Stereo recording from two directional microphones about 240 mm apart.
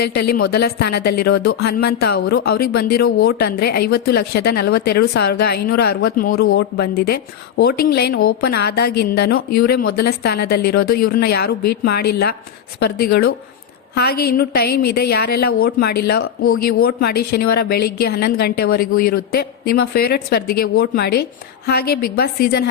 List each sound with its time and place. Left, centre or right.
0.0 s speech: left